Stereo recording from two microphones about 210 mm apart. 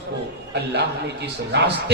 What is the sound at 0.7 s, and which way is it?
A man's voice, 55° right (ahead or behind).